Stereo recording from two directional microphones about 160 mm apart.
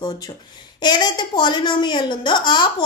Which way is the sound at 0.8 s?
25° left (ahead or behind).